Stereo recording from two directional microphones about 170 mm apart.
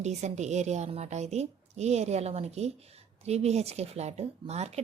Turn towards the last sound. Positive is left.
turn(degrees=-40)  # may be behind; listen again after turning